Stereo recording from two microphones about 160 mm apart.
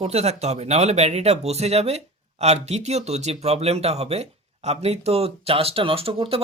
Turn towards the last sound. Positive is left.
turn(degrees=-35)  # may be behind; listen again after turning